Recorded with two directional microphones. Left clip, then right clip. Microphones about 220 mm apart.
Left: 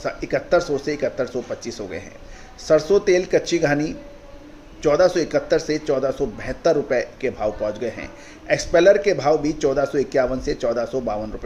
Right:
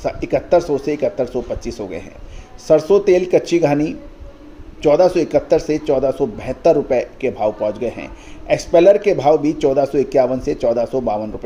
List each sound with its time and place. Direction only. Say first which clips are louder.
0.6 s a man's voice: right 4 dB; 20° right (ahead or behind)